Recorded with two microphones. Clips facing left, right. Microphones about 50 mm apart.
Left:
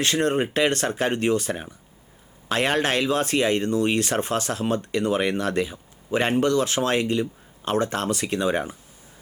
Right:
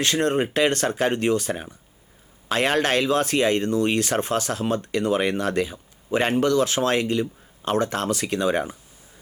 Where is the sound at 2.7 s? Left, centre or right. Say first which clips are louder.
Right 3 dB; centre.